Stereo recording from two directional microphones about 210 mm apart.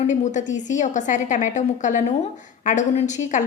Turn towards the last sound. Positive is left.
turn(degrees=35)  # may be behind; listen again after turning